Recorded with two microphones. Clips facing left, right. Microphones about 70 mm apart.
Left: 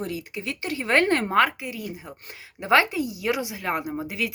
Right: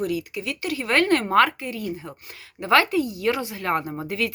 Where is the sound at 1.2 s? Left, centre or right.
Centre.